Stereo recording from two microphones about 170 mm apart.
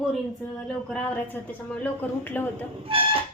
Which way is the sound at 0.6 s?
5° left (ahead or behind).